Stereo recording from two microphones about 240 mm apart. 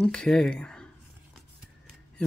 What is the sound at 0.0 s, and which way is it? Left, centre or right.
Speech, centre.